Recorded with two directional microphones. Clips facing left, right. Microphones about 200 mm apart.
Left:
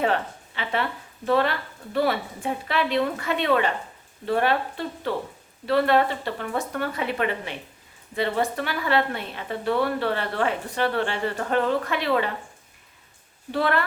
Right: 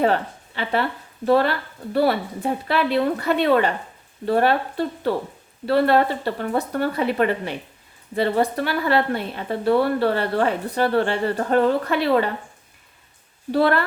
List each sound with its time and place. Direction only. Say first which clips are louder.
0.0 s a woman's voice: right 4 dB; 35° right (ahead or behind)
5.6 s a woman's voice: right 3 dB; 35° right (ahead or behind)
13.5 s a woman's voice: right 6 dB; 35° right (ahead or behind)